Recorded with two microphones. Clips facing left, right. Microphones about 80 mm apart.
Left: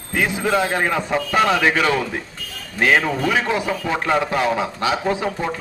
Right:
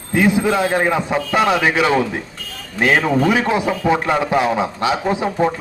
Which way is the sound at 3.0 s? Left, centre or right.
Right.